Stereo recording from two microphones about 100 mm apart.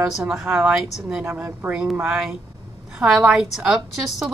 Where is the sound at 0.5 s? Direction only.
20° right (ahead or behind).